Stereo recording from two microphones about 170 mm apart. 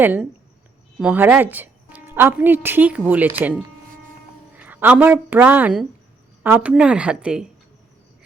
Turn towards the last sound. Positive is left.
turn(degrees=-5)  # may be behind; listen again after turning